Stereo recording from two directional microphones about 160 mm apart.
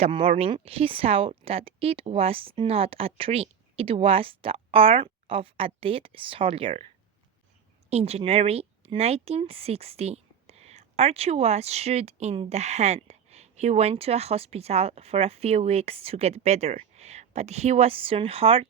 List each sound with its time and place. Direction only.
0.0 s speech: 35° right (ahead or behind)
7.9 s speech: 40° right (ahead or behind)